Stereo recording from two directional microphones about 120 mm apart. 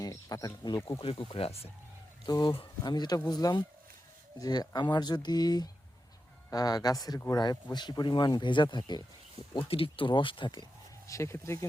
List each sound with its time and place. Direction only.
0.0 s speech: 30° left (ahead or behind)
1.0 s speech: 50° left (ahead or behind)
2.2 s speech: 35° left (ahead or behind)
9.6 s speech: 50° left (ahead or behind)
11.0 s speech: 25° left (ahead or behind)